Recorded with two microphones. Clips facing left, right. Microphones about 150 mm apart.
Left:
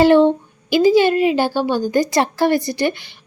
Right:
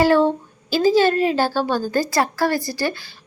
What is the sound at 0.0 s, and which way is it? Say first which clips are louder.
A woman's voice: left 4 dB; 20° left (ahead or behind).